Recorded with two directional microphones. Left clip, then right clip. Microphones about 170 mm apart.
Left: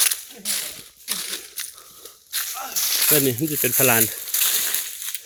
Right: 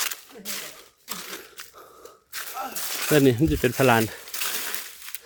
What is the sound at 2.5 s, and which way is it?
Snake, 60° right (ahead or behind).